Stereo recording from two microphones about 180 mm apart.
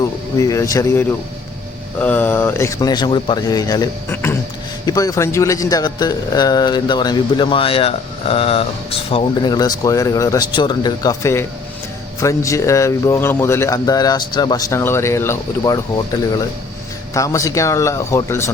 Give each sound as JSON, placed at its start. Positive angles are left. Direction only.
{"t": 0.0, "sound": "speech", "side_deg": 20}